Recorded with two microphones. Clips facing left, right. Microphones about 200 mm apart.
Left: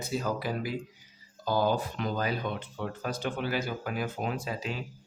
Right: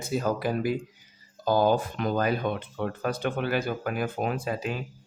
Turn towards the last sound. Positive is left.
turn(degrees=-50)  # may be behind; listen again after turning